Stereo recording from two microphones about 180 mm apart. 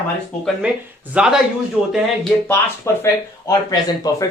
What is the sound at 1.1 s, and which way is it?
Speech, 5° right (ahead or behind).